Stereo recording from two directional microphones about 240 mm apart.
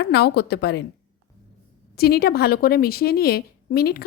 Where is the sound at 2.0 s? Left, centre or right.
Left.